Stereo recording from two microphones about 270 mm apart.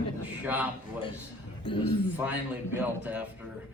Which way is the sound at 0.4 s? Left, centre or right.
Centre.